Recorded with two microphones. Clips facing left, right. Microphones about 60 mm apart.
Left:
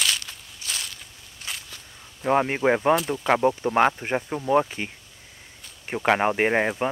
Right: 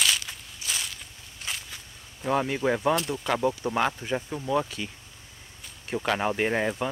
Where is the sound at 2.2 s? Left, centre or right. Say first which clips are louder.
Left 4 dB; left.